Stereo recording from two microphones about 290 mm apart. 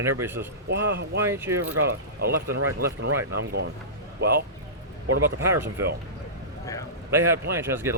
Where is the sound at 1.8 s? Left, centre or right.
Right.